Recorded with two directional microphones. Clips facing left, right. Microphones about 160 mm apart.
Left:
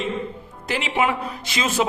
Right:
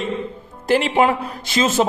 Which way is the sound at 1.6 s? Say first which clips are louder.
Right 4 dB; 25° right (ahead or behind).